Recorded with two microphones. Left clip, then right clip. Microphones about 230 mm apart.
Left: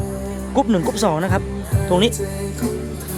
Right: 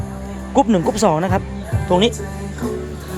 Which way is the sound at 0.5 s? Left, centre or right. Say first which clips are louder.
Right 3 dB; centre.